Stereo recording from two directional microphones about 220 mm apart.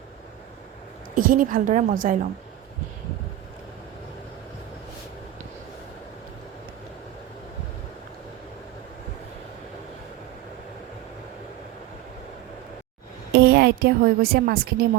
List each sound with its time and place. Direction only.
1.1 s a woman's voice: 40° right (ahead or behind)
13.3 s a woman's voice: 50° right (ahead or behind)